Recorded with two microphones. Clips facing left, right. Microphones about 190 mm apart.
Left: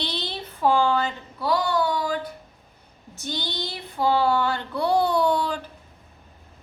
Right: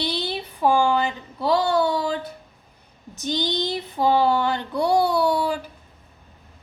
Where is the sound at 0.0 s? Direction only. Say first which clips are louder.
Right 4 dB; 10° right (ahead or behind); by 2.1 s 25° right (ahead or behind).